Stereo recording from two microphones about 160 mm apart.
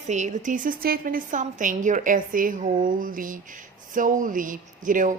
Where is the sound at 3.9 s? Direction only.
55° right (ahead or behind).